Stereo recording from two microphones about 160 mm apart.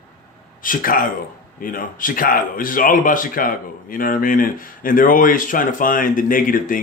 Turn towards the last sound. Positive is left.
turn(degrees=60)  # may be behind; listen again after turning